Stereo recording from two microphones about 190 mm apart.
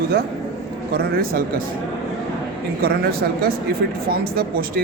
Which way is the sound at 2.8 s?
50° right (ahead or behind).